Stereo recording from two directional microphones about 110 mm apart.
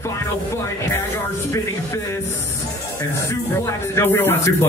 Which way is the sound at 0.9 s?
25° left (ahead or behind).